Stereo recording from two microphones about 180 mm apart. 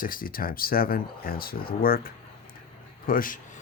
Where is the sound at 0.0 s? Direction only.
50° left (ahead or behind).